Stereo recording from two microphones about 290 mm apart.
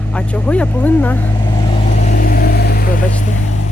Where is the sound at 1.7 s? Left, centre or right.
Left.